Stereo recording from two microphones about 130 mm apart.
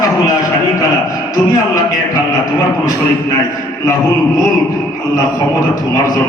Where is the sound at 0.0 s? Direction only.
25° left (ahead or behind).